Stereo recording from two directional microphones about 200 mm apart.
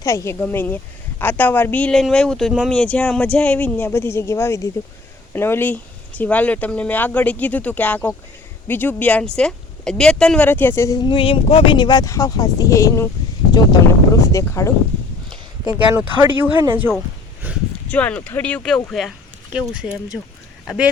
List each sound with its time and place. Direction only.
0.0 s speech: 15° left (ahead or behind)
14.2 s speech: 15° left (ahead or behind)
15.7 s speech: 10° right (ahead or behind)
17.9 s speech: 5° left (ahead or behind)